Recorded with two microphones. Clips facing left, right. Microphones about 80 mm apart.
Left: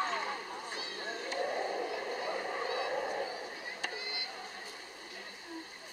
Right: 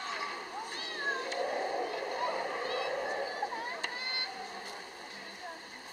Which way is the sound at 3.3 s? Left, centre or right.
Right.